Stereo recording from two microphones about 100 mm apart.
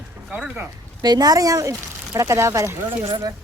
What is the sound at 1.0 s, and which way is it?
Speech, 40° right (ahead or behind).